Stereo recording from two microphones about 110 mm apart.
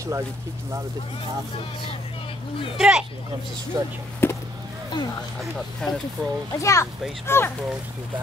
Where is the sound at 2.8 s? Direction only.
5° right (ahead or behind).